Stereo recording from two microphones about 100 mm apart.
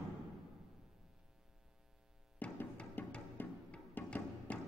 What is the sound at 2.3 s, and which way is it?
Music, 15° left (ahead or behind).